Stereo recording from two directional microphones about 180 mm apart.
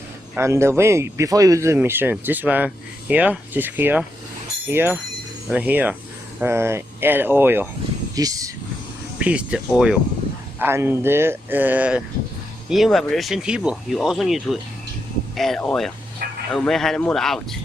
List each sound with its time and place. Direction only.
0.3 s speech: 15° right (ahead or behind)
9.1 s speech: 5° right (ahead or behind)